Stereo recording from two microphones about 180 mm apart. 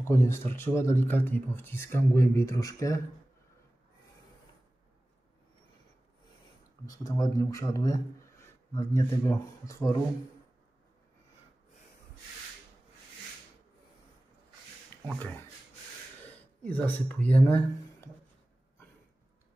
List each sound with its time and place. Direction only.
0.0 s a man's voice: 15° left (ahead or behind)
6.9 s a man's voice: 20° left (ahead or behind)
15.0 s a man's voice: 5° left (ahead or behind)
16.6 s a man's voice: 10° left (ahead or behind)